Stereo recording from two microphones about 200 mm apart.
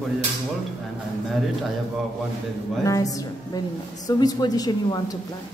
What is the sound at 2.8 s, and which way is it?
A woman's voice, 15° left (ahead or behind).